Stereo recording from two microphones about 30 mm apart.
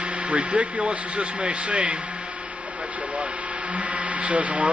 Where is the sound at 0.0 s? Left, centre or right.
Right.